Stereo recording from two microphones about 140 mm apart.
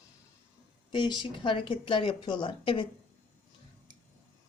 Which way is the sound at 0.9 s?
35° left (ahead or behind).